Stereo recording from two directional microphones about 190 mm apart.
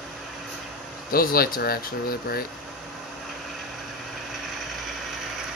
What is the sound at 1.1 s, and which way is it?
Speech, 50° left (ahead or behind).